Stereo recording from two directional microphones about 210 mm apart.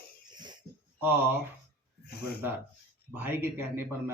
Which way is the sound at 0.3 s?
20° right (ahead or behind).